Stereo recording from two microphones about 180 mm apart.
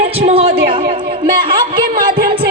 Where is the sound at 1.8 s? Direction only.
55° right (ahead or behind).